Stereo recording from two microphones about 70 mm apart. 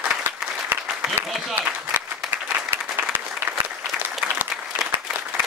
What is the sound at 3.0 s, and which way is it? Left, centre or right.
Applause, right.